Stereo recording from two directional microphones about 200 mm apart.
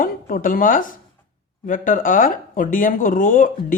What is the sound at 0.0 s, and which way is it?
Speech, 45° left (ahead or behind).